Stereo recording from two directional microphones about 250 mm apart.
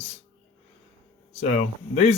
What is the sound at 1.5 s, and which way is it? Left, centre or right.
Speech, left.